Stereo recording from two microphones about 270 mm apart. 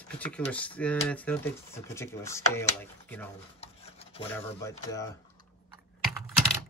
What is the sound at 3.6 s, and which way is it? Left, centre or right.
Stir, left.